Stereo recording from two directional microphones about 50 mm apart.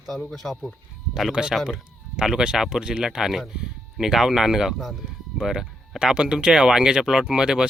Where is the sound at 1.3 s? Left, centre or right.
Centre.